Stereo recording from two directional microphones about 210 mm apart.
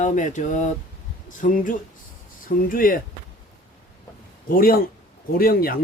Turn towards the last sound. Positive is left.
turn(degrees=45)  # may be behind; listen again after turning